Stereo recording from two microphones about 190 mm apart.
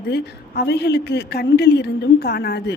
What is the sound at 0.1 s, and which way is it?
A woman's voice, 60° left (ahead or behind).